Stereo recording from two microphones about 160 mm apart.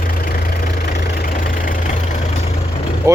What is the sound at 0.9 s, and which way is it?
Vehicle, 60° left (ahead or behind).